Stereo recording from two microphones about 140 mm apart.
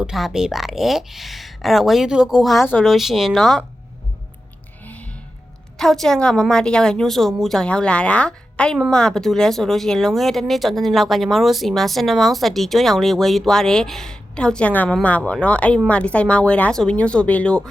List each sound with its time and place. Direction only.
0.0 s speech: centre (ahead or behind)
5.7 s speech: centre (ahead or behind)